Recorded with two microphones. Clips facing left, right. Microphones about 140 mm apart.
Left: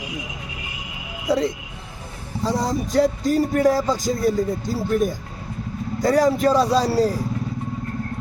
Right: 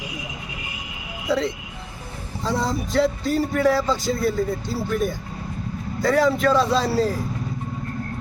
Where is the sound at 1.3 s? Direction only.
40° left (ahead or behind).